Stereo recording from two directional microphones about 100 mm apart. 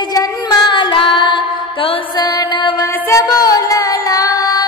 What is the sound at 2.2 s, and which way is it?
Music, 40° left (ahead or behind).